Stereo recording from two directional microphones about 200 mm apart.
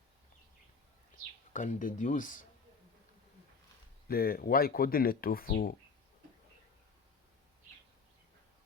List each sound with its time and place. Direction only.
1.5 s a man's voice: 40° left (ahead or behind)
4.1 s speech: 50° left (ahead or behind)